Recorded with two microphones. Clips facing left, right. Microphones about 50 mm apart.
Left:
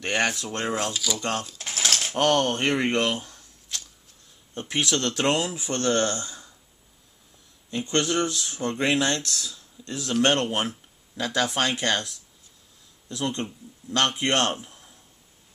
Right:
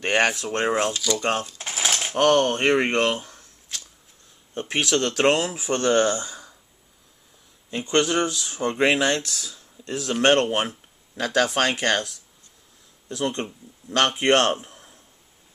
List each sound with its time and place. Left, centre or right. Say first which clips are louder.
0.0 s speech: right 4 dB; right
0.9 s speech: right 4 dB; centre
1.4 s a sound: right 2 dB; centre
2.3 s speech: right 4 dB; right
3.2 s a sound: right 1 dB; right
4.6 s speech: right 3 dB; right
7.7 s speech: right 3 dB; right
11.3 s speech: right 4 dB; right
13.1 s speech: right 2 dB; right